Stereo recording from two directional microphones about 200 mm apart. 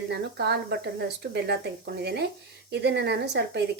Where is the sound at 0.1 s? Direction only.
55° right (ahead or behind).